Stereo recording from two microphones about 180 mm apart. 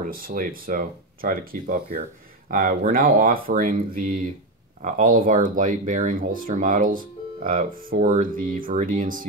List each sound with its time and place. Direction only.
0.0 s speech: 50° right (ahead or behind)